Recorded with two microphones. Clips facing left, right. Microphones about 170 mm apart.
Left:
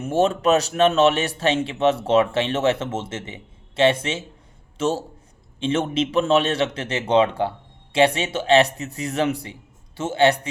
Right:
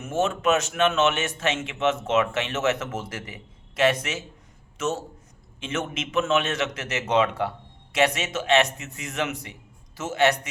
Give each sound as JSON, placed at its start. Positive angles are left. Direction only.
{"t": 0.0, "sound": "a man's voice", "side_deg": 35}